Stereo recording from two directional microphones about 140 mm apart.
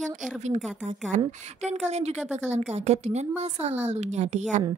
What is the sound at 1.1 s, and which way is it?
A woman's voice, 60° right (ahead or behind).